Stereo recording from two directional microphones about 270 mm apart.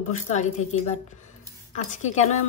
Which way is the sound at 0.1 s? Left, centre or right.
Left.